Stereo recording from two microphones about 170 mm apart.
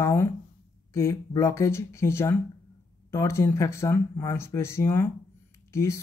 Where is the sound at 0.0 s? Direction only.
15° left (ahead or behind).